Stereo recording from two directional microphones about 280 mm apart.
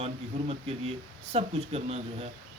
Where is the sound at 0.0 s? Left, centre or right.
Right.